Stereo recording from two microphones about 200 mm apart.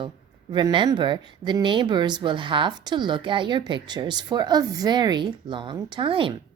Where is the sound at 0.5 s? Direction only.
25° right (ahead or behind).